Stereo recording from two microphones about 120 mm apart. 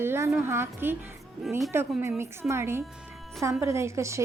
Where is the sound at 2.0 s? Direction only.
20° right (ahead or behind).